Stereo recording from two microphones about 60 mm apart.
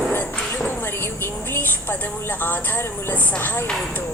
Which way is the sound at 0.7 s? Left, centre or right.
Left.